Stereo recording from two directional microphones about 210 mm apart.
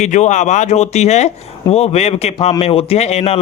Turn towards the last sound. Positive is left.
turn(degrees=30)  # may be behind; listen again after turning